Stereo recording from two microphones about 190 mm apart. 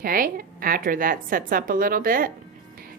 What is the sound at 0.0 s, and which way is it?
Speech, 50° right (ahead or behind).